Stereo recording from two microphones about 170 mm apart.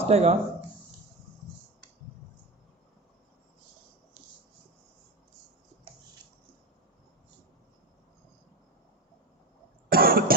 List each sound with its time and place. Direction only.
0.0 s speech: 40° right (ahead or behind)
9.9 s cough: 60° right (ahead or behind)